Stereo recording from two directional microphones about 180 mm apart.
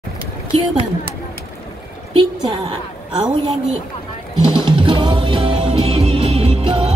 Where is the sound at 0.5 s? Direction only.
30° right (ahead or behind).